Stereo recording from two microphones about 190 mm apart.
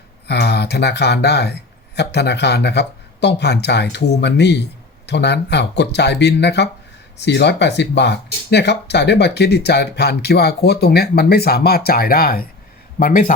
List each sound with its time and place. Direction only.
0.3 s a man's voice: 60° left (ahead or behind); by 13.3 s 45° left (ahead or behind)